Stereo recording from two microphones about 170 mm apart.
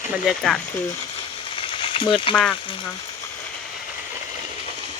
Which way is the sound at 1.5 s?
30° left (ahead or behind).